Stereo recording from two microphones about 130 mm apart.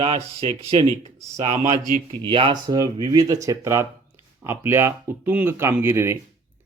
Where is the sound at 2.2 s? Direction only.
40° right (ahead or behind).